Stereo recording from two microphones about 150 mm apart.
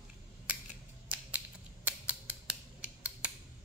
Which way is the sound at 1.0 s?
10° right (ahead or behind).